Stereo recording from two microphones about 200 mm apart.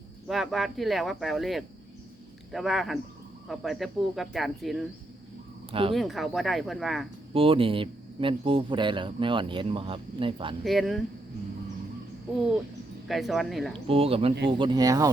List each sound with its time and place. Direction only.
0.3 s speech: centre (ahead or behind)
5.9 s speech: centre (ahead or behind)
7.3 s speech: 25° right (ahead or behind)
10.6 s speech: centre (ahead or behind)
13.1 s speech: centre (ahead or behind)
13.8 s speech: 30° right (ahead or behind)